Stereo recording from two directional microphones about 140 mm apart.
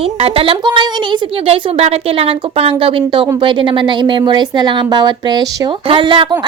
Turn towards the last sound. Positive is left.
turn(degrees=-35)  # may be behind; listen again after turning